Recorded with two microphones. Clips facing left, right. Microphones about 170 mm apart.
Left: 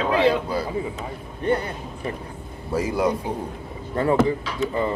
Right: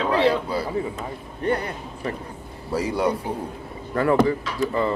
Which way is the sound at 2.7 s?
30° right (ahead or behind).